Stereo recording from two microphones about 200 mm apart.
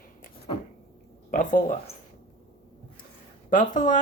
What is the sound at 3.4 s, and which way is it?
Speech, 40° left (ahead or behind).